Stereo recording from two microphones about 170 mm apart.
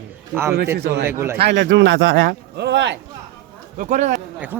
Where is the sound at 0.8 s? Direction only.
75° right (ahead or behind).